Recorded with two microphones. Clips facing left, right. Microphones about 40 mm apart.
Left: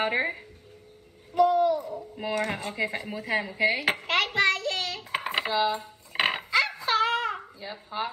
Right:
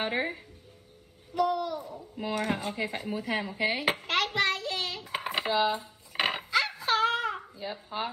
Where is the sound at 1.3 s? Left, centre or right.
Left.